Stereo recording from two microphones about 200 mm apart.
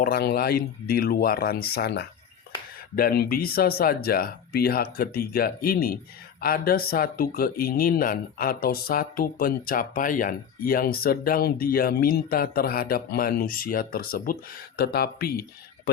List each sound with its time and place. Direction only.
0.0 s speech: 50° left (ahead or behind)